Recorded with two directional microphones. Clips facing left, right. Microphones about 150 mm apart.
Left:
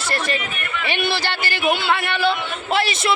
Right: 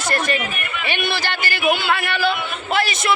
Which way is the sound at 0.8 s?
30° left (ahead or behind).